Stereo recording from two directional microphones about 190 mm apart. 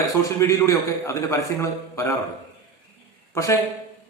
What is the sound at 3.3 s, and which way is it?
Speech, 15° left (ahead or behind).